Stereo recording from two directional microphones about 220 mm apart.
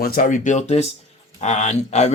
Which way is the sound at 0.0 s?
40° left (ahead or behind).